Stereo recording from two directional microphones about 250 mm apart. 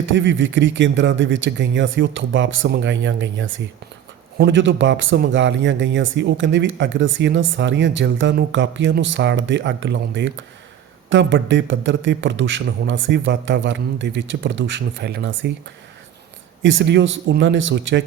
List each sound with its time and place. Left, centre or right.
0.0 s speech: right
16.6 s speech: right